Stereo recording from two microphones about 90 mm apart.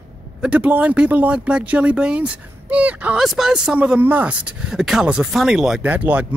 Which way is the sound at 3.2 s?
5° right (ahead or behind).